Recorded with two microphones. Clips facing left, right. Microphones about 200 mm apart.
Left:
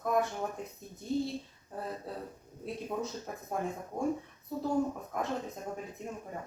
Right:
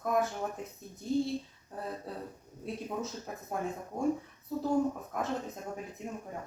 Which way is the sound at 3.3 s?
Centre (ahead or behind).